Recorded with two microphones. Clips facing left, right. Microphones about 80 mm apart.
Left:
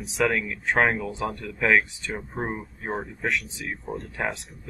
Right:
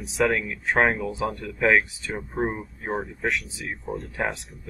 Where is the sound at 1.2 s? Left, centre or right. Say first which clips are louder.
Right 3 dB; right.